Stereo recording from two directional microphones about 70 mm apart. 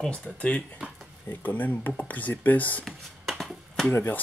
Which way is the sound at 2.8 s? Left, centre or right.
Centre.